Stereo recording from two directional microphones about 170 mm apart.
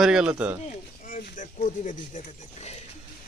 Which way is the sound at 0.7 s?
55° left (ahead or behind).